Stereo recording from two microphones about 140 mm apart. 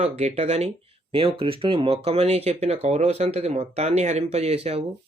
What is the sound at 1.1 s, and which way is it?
Speech, 40° right (ahead or behind).